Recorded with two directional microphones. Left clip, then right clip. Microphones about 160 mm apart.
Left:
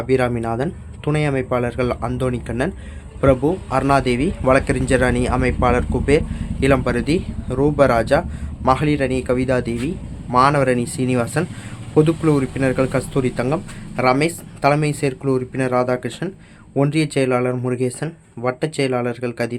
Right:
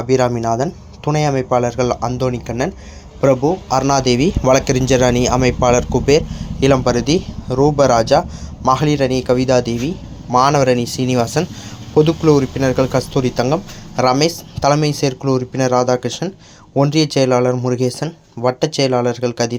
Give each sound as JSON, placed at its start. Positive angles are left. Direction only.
{"t": 0.1, "sound": "speech", "side_deg": 0}